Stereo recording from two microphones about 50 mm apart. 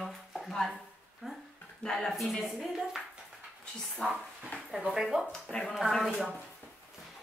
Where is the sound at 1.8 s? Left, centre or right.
Centre.